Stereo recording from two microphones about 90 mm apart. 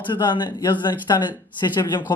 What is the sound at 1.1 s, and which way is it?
Speech, 45° left (ahead or behind).